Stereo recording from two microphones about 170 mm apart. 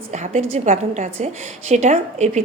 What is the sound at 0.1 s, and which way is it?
A woman's voice, 45° right (ahead or behind).